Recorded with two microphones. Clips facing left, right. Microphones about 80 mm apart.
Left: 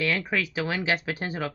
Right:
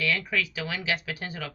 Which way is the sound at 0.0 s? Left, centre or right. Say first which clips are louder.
Left 1 dB; left.